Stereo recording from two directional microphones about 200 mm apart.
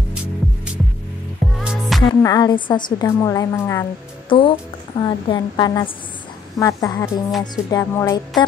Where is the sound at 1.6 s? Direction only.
Centre (ahead or behind).